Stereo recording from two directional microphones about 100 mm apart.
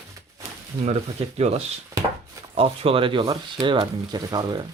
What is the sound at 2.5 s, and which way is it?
Speech, 75° right (ahead or behind).